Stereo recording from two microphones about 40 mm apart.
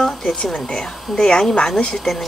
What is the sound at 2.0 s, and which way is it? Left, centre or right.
Speech, centre.